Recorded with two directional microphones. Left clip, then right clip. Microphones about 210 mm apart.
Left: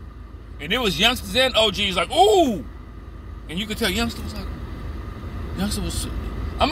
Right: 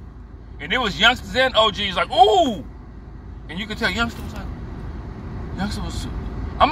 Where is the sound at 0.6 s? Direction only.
15° left (ahead or behind).